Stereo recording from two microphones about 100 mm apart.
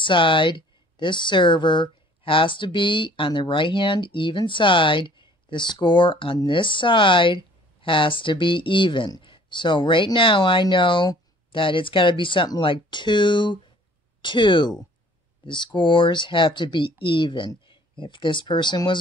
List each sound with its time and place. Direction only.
0.0 s speech: 55° left (ahead or behind)